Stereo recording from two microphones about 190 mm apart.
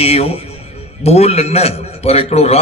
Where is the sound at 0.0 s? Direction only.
35° left (ahead or behind).